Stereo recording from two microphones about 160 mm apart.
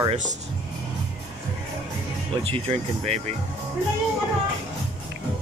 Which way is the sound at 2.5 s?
45° right (ahead or behind).